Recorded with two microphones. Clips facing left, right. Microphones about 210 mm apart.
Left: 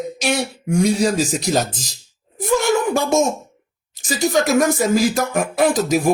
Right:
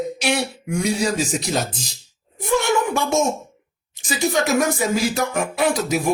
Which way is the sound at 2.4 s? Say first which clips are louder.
Left 2 dB; 40° left (ahead or behind).